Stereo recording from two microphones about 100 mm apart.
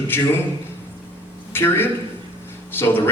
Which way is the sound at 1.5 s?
25° left (ahead or behind).